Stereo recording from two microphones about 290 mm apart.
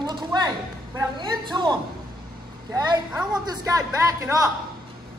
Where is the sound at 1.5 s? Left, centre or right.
Centre.